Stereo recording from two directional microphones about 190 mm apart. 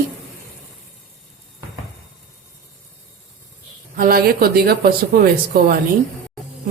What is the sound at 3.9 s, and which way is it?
Speech, 50° right (ahead or behind).